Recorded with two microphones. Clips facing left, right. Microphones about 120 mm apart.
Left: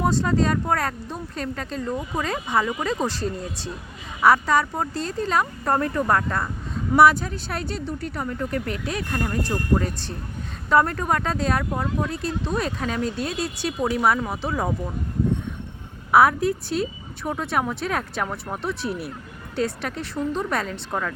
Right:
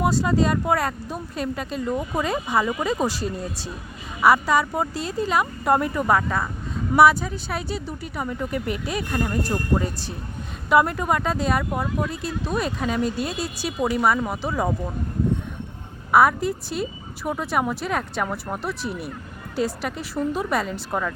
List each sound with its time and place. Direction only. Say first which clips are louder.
0.0 s speech: right 1 dB; 5° right (ahead or behind)
16.1 s speech: left 1 dB; centre (ahead or behind)